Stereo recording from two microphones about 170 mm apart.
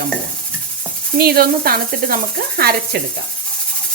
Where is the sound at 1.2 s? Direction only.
65° right (ahead or behind).